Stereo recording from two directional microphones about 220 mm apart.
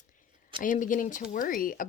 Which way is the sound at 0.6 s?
35° left (ahead or behind).